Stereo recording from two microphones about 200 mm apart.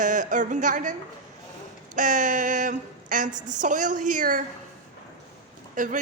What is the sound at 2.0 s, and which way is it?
A woman's voice, 40° right (ahead or behind).